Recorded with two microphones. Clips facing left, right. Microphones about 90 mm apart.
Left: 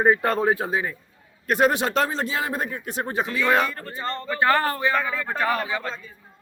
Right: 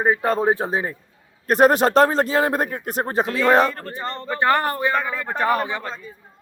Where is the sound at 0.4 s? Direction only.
25° right (ahead or behind).